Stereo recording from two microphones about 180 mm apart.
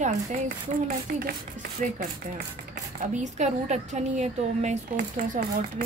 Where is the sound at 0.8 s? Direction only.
55° right (ahead or behind).